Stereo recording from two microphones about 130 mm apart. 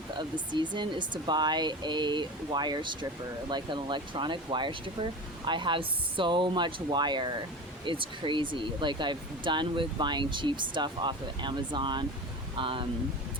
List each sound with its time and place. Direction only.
0.2 s speech: 35° right (ahead or behind)